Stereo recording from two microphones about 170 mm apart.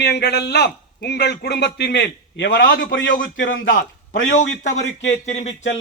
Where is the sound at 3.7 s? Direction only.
45° left (ahead or behind).